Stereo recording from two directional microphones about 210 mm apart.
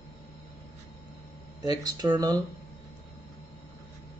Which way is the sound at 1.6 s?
20° right (ahead or behind).